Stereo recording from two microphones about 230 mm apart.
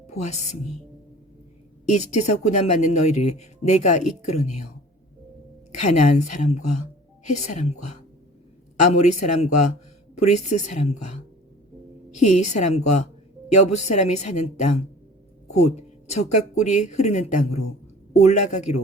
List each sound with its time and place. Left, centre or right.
0.1 s speech: left
1.9 s a woman's voice: left
5.8 s a woman's voice: left
12.2 s speech: left